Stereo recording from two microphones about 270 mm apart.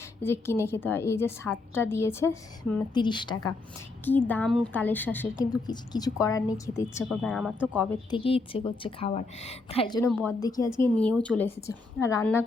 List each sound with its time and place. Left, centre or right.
0.2 s a woman's voice: centre
7.0 s a woman's voice: centre
7.9 s a woman's voice: centre